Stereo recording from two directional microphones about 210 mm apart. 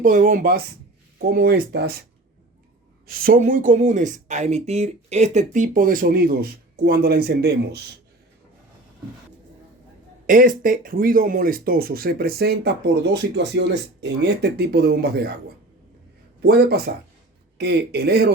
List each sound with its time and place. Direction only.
0.0 s speech: 40° right (ahead or behind)
3.1 s speech: 45° right (ahead or behind)
10.2 s speech: 40° right (ahead or behind)
16.4 s speech: 50° right (ahead or behind)